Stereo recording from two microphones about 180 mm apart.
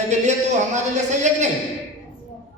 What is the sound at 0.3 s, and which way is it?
Speech, 40° right (ahead or behind).